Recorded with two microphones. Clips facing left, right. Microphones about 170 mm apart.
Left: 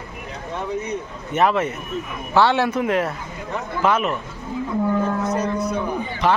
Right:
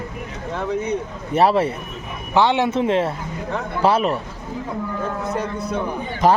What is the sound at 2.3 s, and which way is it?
A man's voice, 20° right (ahead or behind).